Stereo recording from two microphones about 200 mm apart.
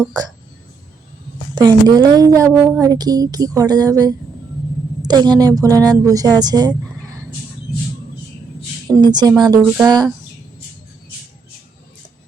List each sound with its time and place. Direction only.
0.1 s a woman's voice: 20° right (ahead or behind)
1.5 s a woman's voice: 20° right (ahead or behind)
9.0 s a woman's voice: 20° right (ahead or behind)